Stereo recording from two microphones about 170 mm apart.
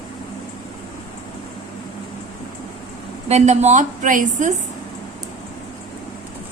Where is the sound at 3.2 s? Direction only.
40° right (ahead or behind).